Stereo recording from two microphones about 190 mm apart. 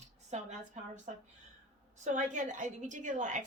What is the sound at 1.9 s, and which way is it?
Speech, 40° right (ahead or behind).